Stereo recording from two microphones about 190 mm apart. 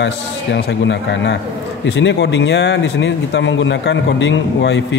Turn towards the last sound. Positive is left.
turn(degrees=70)  # may be behind; listen again after turning